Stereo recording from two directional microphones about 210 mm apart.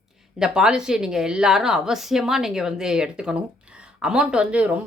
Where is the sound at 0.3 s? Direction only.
5° right (ahead or behind).